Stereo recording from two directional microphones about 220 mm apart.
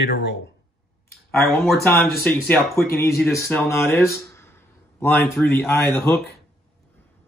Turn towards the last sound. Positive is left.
turn(degrees=5)  # may be behind; listen again after turning